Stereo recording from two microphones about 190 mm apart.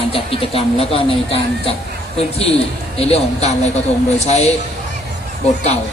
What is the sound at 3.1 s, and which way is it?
Speech, 35° left (ahead or behind).